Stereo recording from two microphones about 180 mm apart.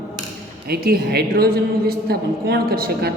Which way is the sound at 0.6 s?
60° right (ahead or behind).